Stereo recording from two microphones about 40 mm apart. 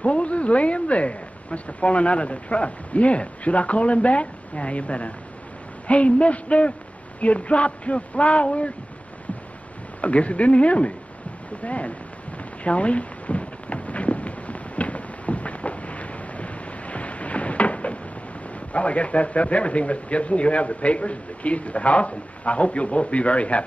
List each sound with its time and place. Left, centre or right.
0.0 s speech: left
10.0 s speech: left
12.6 s a sound: left
18.7 s speech: left